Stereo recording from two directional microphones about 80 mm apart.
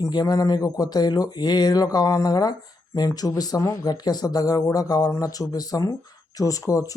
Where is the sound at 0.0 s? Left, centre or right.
Left.